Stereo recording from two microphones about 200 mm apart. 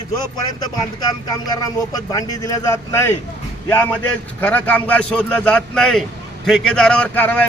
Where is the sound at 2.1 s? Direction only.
15° left (ahead or behind).